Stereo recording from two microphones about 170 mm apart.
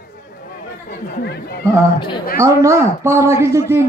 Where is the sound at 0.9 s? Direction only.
65° left (ahead or behind).